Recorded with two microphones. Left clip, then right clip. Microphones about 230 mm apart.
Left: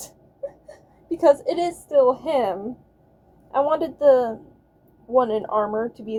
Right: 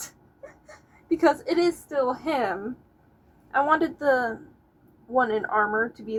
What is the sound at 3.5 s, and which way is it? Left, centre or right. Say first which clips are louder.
Speech: left 1 dB; centre.